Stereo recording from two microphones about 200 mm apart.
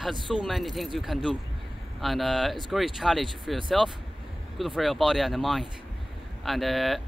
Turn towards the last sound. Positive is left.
turn(degrees=0)  # may be behind; listen again after turning